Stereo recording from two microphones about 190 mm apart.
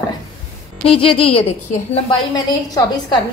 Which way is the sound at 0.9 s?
30° left (ahead or behind).